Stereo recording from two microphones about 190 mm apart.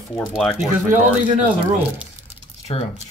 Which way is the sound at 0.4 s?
5° left (ahead or behind).